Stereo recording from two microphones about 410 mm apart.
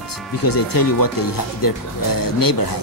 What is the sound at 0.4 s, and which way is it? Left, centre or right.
Speech, left.